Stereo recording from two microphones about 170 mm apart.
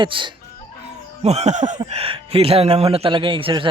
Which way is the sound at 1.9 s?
35° right (ahead or behind).